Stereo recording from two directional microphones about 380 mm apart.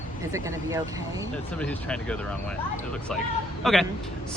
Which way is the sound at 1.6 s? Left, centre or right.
Centre.